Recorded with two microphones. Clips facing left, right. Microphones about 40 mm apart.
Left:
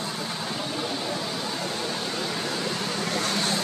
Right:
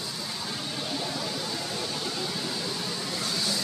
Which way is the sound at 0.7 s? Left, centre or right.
Centre.